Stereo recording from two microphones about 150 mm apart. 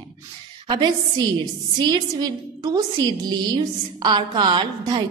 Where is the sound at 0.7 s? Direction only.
30° right (ahead or behind).